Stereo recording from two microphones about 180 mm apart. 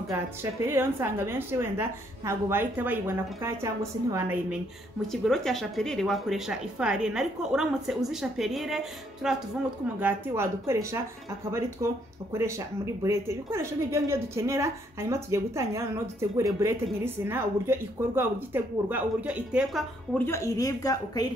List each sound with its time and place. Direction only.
0.1 s speech: 15° right (ahead or behind)
5.0 s speech: centre (ahead or behind)
20.2 s a woman's voice: 15° left (ahead or behind)